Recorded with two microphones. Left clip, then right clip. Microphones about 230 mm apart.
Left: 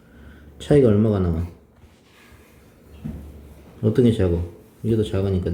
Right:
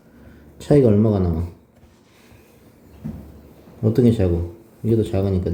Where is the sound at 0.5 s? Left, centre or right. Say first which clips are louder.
Right 1 dB; centre.